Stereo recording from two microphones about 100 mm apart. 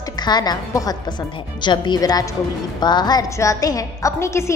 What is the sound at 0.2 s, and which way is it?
A woman's voice, 45° left (ahead or behind).